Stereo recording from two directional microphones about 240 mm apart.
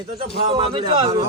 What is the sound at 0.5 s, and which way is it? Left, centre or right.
Speech, right.